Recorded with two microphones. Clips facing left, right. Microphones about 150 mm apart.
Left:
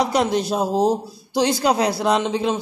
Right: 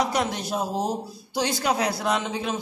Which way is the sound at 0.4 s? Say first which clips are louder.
Left 6 dB; 75° left (ahead or behind).